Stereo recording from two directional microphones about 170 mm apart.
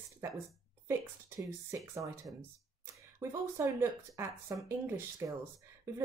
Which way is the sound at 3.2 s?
15° right (ahead or behind).